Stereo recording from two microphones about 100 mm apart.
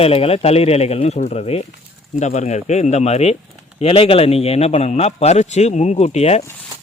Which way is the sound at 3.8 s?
75° left (ahead or behind).